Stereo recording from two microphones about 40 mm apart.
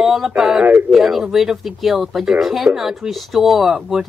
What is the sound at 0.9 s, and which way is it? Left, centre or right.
Speech, centre.